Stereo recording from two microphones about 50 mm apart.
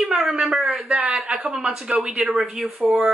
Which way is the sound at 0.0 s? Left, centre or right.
Centre.